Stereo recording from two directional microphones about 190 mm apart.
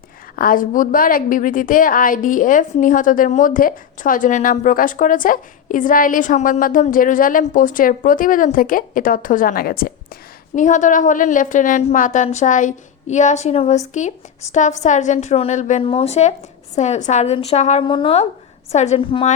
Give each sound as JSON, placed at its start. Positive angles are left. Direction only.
{"t": 0.3, "sound": "a woman's voice", "side_deg": 45}